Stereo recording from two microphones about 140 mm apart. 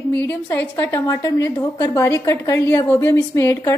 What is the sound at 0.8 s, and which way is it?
A woman's voice, 25° left (ahead or behind).